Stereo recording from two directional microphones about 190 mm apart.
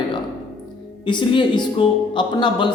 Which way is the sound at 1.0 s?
25° left (ahead or behind).